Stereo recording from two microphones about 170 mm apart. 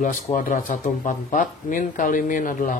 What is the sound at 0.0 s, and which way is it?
Speech, 50° left (ahead or behind).